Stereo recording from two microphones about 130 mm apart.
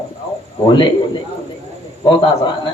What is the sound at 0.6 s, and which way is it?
Speech, 40° left (ahead or behind).